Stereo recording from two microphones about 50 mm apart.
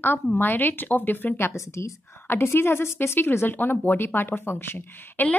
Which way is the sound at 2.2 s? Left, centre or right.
Left.